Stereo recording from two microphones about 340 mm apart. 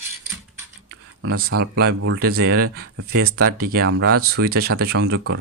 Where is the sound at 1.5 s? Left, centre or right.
Right.